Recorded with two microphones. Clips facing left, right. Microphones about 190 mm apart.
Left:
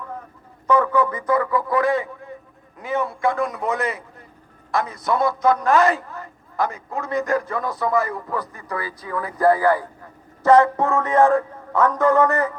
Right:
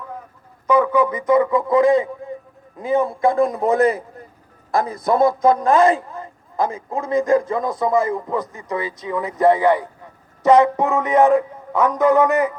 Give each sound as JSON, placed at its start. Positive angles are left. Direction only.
{"t": 0.7, "sound": "a sound", "side_deg": -15}
{"t": 1.3, "sound": "a man's voice", "side_deg": -20}
{"t": 5.2, "sound": "a man's voice", "side_deg": -30}